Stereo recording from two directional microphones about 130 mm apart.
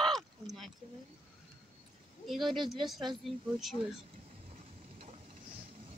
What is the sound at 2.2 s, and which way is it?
Speech, centre (ahead or behind).